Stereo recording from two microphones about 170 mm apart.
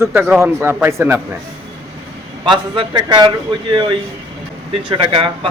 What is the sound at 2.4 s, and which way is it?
A man's voice, 30° right (ahead or behind).